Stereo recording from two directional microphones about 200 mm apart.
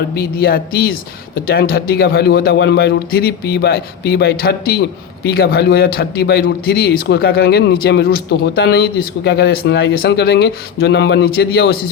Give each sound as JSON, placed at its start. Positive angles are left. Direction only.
{"t": 0.1, "sound": "a man's voice", "side_deg": 50}